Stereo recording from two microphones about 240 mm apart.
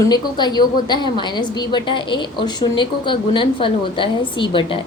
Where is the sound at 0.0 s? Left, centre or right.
Centre.